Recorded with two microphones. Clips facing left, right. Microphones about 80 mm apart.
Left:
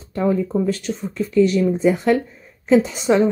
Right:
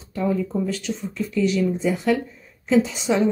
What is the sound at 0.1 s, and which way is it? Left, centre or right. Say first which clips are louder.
Speech: left 4 dB; left.